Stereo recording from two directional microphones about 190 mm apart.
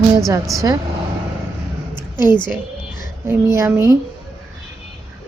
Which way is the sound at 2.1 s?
25° left (ahead or behind).